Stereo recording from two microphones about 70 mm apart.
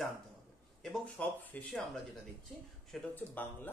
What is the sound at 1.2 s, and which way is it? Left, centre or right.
Speech, left.